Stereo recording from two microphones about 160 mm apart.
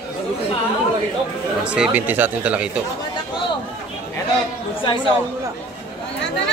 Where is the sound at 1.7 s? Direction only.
10° right (ahead or behind).